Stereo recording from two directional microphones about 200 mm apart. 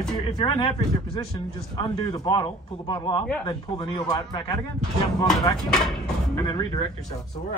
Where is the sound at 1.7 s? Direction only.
25° left (ahead or behind).